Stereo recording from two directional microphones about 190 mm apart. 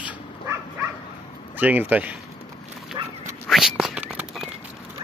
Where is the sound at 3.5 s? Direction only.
Centre (ahead or behind).